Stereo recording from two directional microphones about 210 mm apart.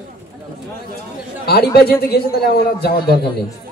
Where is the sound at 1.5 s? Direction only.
50° left (ahead or behind).